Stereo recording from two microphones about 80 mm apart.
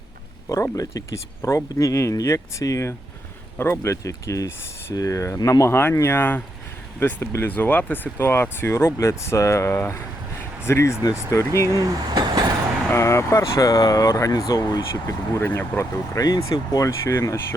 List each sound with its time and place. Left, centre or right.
0.8 s speech: left
11.8 s speech: right
12.9 s speech: left
15.3 s speech: left
15.8 s speech: left